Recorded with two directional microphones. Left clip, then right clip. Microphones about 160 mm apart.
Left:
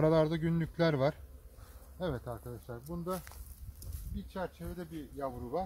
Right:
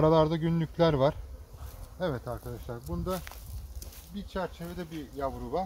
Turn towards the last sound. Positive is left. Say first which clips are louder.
# right 5 dB
turn(degrees=-10)  # may be behind; listen again after turning